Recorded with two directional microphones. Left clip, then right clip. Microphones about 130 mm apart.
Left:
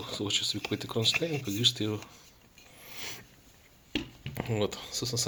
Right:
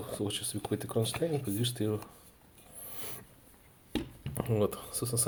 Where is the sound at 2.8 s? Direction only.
30° right (ahead or behind).